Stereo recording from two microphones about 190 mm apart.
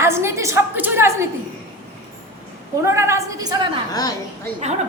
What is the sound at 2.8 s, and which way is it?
Speech, 15° right (ahead or behind).